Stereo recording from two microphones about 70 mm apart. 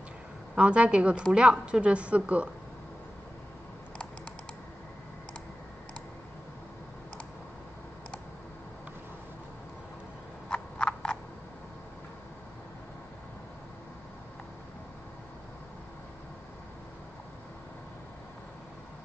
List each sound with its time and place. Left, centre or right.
0.6 s a woman's voice: centre
10.5 s frog: centre